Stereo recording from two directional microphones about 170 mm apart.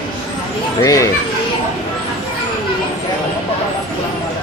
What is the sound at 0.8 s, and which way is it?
Speech, 20° left (ahead or behind).